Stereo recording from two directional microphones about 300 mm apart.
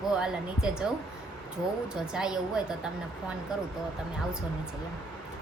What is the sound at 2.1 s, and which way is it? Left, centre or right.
Speech, centre.